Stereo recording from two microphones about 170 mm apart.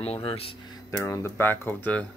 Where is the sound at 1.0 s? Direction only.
15° left (ahead or behind).